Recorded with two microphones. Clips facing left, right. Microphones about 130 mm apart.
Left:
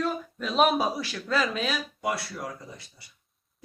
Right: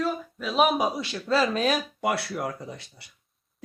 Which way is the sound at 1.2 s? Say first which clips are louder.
Right 5 dB; 30° right (ahead or behind).